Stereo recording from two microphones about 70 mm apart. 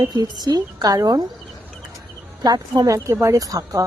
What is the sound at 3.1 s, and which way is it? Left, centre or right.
Speech, right.